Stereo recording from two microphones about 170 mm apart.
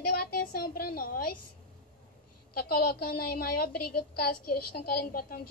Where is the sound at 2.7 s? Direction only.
65° left (ahead or behind).